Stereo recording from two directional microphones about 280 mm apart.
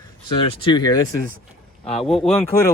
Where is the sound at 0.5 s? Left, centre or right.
Centre.